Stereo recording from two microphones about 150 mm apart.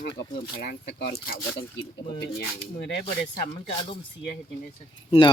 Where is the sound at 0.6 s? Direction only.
90° left.